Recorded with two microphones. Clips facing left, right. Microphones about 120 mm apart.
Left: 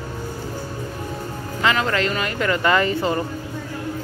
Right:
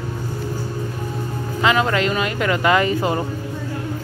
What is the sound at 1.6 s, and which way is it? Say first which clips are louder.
Speech: right 3 dB; 20° right (ahead or behind).